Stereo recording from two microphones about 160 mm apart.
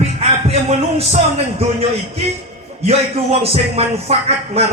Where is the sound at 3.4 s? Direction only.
40° right (ahead or behind).